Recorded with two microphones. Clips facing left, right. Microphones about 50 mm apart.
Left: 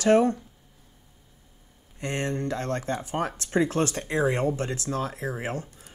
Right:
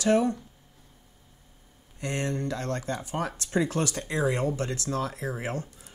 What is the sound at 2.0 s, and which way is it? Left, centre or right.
Speech, left.